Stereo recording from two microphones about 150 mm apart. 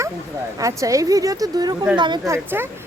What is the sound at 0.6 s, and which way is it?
A woman's voice, 20° right (ahead or behind).